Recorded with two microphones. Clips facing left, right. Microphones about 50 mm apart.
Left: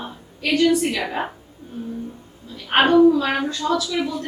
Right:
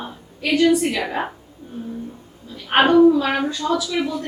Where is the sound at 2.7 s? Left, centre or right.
Centre.